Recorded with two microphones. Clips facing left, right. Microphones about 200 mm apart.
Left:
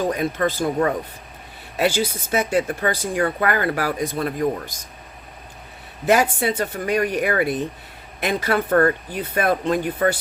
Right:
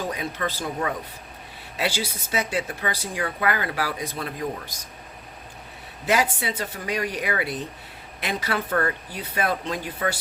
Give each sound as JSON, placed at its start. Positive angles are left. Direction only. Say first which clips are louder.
{"t": 0.1, "sound": "speech", "louder": "left 7 dB", "side_deg": 50}
{"t": 6.1, "sound": "speech", "louder": "left 6 dB", "side_deg": 50}